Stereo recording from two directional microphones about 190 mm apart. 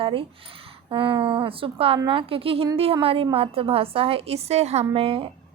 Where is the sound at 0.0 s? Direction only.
30° right (ahead or behind).